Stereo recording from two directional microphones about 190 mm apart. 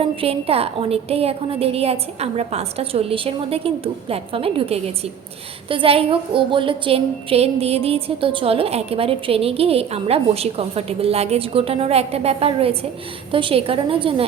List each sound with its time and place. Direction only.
0.0 s a woman's voice: 30° right (ahead or behind)